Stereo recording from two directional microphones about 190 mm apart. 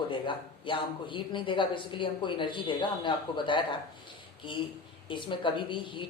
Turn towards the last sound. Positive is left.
turn(degrees=25)  # may be behind; listen again after turning